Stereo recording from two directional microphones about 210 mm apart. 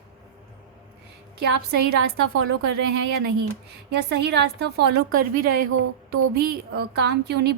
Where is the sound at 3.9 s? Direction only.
50° right (ahead or behind).